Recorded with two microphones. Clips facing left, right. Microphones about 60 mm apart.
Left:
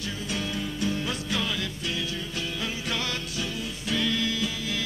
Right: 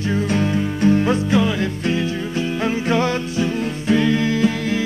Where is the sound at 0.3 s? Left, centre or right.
Right.